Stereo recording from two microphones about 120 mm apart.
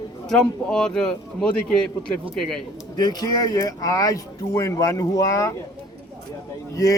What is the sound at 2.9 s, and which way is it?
Speech, 30° left (ahead or behind).